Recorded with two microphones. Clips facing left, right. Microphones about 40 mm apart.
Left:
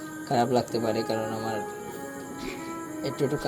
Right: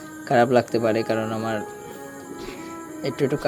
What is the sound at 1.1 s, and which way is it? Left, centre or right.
Speech, right.